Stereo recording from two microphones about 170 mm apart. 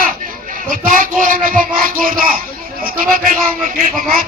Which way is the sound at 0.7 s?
55° right (ahead or behind).